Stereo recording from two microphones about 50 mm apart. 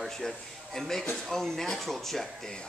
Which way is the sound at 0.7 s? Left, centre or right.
Centre.